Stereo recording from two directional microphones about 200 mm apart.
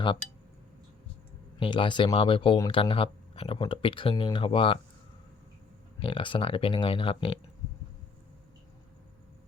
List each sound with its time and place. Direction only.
1.5 s speech: 25° left (ahead or behind)
6.0 s speech: 25° left (ahead or behind)